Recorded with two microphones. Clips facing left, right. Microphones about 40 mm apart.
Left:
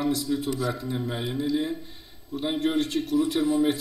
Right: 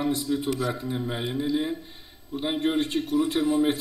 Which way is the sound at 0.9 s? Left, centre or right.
Centre.